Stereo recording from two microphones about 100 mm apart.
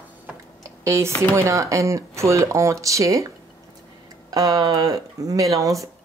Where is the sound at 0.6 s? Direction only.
30° right (ahead or behind).